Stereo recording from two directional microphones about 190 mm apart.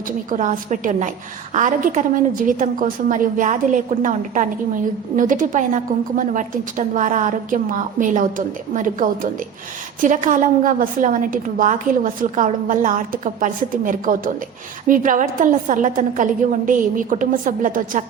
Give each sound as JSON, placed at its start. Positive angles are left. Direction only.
{"t": 0.3, "sound": "a woman's voice", "side_deg": -40}